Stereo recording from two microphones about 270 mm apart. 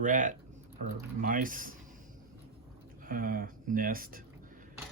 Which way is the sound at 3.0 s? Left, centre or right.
Right.